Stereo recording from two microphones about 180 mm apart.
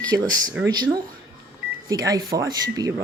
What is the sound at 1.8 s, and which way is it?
Speech, 20° right (ahead or behind).